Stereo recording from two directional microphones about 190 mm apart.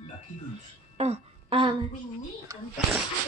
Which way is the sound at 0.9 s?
35° right (ahead or behind).